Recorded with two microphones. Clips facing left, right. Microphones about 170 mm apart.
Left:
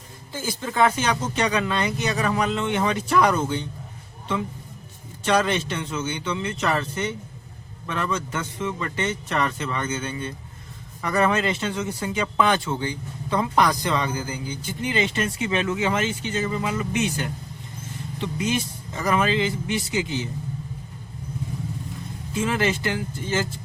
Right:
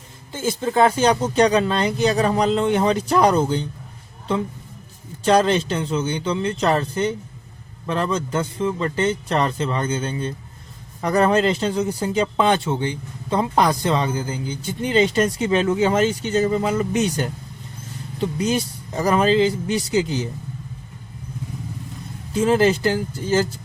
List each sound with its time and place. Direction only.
0.3 s speech: 25° right (ahead or behind)
5.2 s speech: 30° right (ahead or behind)
18.3 s speech: 35° right (ahead or behind)
22.3 s speech: 35° right (ahead or behind)